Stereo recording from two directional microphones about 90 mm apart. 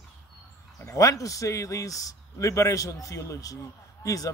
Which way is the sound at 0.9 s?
40° left (ahead or behind).